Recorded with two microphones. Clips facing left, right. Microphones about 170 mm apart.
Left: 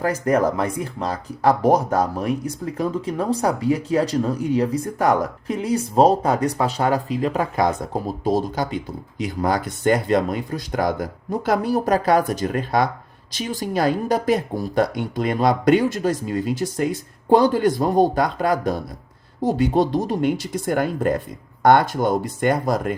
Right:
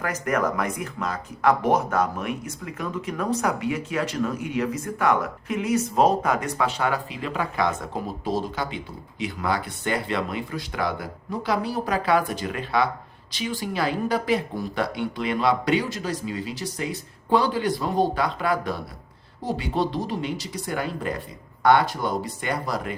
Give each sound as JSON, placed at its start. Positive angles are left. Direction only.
{"t": 0.0, "sound": "speech", "side_deg": 30}